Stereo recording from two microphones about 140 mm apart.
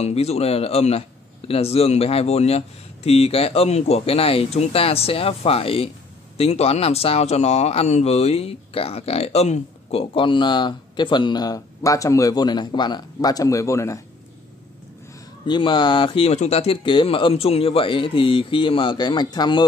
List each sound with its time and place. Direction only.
0.0 s speech: 50° left (ahead or behind); by 14.0 s 20° left (ahead or behind)
15.4 s speech: 35° left (ahead or behind)